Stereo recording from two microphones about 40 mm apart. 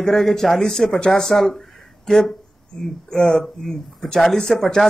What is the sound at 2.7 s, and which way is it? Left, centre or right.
Speech, left.